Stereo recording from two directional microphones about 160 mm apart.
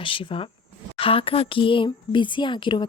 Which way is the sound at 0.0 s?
30° left (ahead or behind).